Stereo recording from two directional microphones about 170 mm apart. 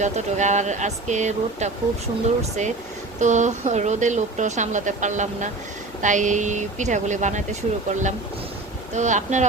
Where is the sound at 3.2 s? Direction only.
45° right (ahead or behind).